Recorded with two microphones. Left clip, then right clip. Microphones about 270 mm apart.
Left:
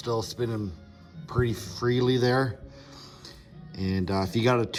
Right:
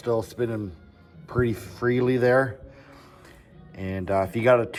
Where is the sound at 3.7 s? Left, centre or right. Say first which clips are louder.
Right 4 dB; centre.